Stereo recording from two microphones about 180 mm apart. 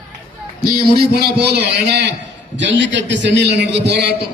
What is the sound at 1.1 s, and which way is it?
A man's voice, 65° right (ahead or behind).